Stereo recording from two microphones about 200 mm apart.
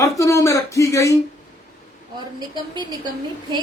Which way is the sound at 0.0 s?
15° left (ahead or behind).